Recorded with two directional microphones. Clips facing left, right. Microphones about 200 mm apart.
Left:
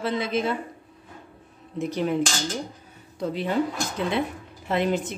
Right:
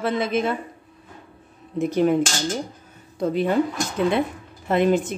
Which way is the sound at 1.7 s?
50° right (ahead or behind).